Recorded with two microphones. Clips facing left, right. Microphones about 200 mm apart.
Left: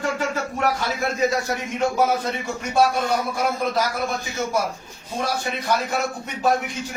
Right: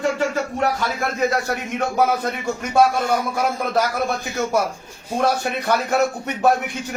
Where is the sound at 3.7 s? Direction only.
60° right (ahead or behind).